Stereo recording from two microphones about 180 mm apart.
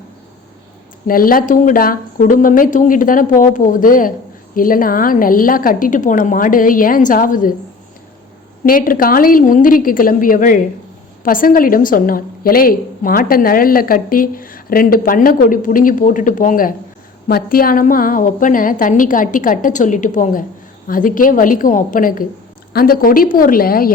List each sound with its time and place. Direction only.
1.0 s a woman's voice: 50° left (ahead or behind)
8.6 s a woman's voice: 50° left (ahead or behind)